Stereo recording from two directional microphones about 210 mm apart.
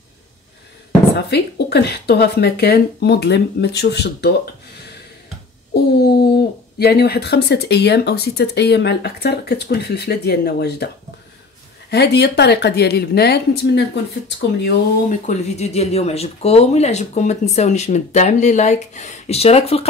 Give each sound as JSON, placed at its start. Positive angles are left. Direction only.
{"t": 1.1, "sound": "speech", "side_deg": 50}
{"t": 5.7, "sound": "a sound", "side_deg": 50}
{"t": 6.8, "sound": "speech", "side_deg": 50}
{"t": 11.9, "sound": "speech", "side_deg": 50}
{"t": 15.0, "sound": "speech", "side_deg": 35}